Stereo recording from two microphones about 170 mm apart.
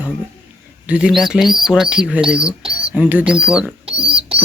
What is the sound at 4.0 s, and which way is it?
Rodents, 35° right (ahead or behind).